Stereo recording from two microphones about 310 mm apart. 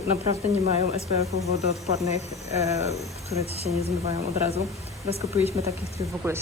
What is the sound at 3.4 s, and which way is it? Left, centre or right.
Speech, centre.